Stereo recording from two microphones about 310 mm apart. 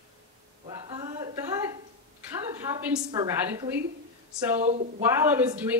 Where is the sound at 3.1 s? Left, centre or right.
Centre.